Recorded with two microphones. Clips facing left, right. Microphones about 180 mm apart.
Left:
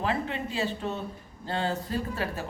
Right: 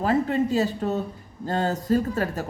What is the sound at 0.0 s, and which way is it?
Speech, 40° right (ahead or behind).